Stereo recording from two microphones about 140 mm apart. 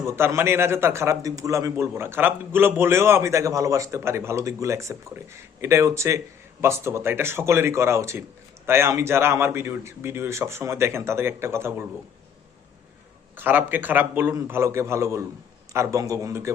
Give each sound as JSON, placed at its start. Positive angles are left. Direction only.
{"t": 0.0, "sound": "a man's voice", "side_deg": -20}
{"t": 13.3, "sound": "a man's voice", "side_deg": -15}